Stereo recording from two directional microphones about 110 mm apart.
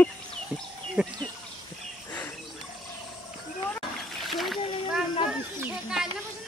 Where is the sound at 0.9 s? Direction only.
5° left (ahead or behind).